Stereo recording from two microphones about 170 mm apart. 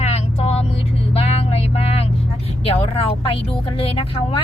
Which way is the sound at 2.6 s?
35° left (ahead or behind).